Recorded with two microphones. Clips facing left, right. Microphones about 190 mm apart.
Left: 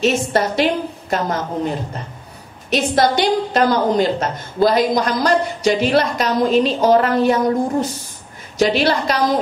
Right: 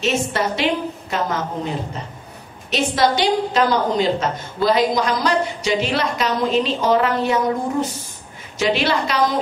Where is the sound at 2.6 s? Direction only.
50° left (ahead or behind).